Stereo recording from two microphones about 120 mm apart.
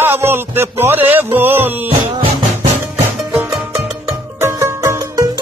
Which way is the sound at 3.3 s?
5° right (ahead or behind).